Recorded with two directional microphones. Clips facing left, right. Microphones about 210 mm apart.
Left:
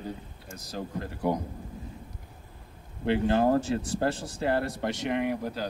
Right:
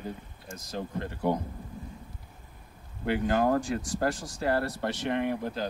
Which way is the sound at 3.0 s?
30° left (ahead or behind).